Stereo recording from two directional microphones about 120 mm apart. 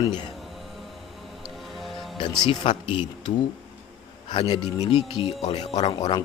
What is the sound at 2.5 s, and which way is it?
Speech, 45° left (ahead or behind).